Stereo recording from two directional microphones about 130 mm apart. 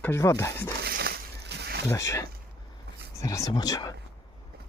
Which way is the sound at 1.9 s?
25° left (ahead or behind).